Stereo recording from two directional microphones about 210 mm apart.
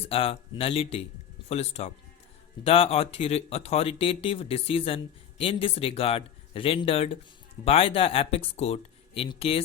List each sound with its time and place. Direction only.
0.1 s speech: 25° left (ahead or behind)